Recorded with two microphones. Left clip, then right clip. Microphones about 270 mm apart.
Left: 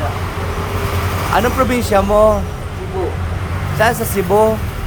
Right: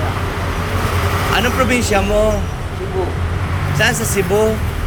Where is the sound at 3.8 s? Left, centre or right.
Left.